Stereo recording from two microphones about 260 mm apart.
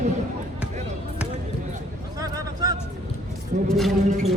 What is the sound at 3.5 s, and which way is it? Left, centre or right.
Speech, right.